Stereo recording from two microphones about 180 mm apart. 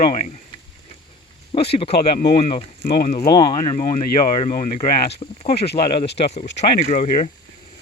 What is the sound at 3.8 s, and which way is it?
Speech, 45° left (ahead or behind).